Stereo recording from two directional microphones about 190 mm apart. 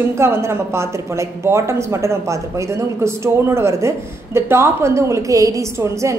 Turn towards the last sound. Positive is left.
turn(degrees=-15)  # may be behind; listen again after turning